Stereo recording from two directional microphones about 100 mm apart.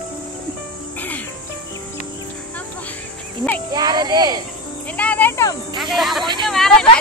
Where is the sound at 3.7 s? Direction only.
45° right (ahead or behind).